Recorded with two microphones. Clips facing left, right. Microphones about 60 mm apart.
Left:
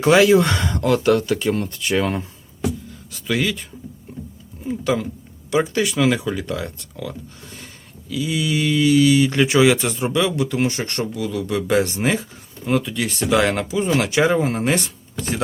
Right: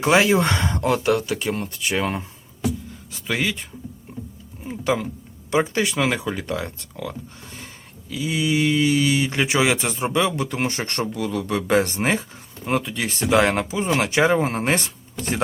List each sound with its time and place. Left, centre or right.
0.1 s speech: right
0.9 s speech: centre
3.1 s speech: right
4.6 s speech: right
8.1 s speech: right